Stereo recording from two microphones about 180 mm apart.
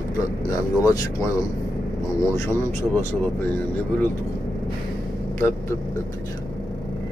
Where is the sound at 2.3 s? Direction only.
15° left (ahead or behind).